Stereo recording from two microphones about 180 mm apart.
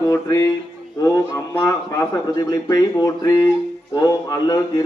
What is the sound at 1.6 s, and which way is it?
Speech, 20° left (ahead or behind).